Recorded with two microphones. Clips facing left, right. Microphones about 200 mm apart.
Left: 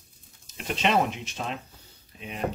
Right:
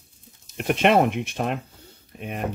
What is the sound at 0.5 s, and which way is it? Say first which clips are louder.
Speech: right 6 dB; 60° right (ahead or behind).